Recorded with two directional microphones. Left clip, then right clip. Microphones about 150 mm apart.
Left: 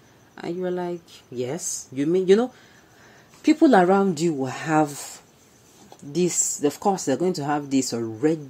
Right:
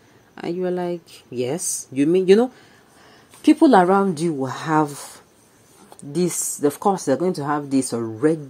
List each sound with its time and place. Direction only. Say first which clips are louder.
0.4 s speech: right 3 dB; 30° right (ahead or behind)
3.6 s a woman's voice: right 2 dB; 5° right (ahead or behind)
6.1 s a woman's voice: even; 10° right (ahead or behind)